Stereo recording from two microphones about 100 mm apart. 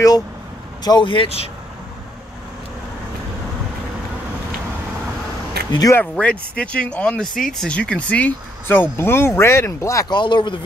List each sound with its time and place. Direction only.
0.8 s speech: 50° left (ahead or behind); by 1.5 s 75° left (ahead or behind)
5.7 s speech: 40° left (ahead or behind)
6.1 s speech: 10° left (ahead or behind); by 10.0 s 30° left (ahead or behind)
10.0 s speech: 50° left (ahead or behind)